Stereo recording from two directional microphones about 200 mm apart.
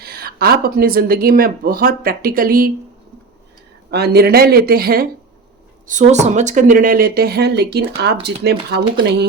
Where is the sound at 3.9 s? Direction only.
55° right (ahead or behind).